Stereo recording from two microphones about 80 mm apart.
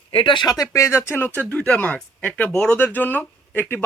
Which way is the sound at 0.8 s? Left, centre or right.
Left.